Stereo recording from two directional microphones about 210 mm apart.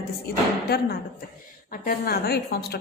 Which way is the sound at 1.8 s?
45° left (ahead or behind).